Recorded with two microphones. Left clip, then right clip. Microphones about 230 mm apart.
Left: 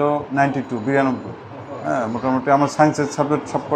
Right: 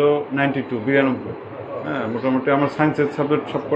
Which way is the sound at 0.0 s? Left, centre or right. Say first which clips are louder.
Even; left.